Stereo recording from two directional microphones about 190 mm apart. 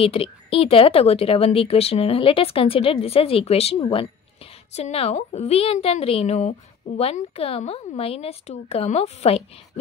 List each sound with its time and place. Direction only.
0.0 s a woman's voice: 30° left (ahead or behind)